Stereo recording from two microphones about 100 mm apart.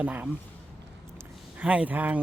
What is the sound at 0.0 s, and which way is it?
Speech, 20° right (ahead or behind).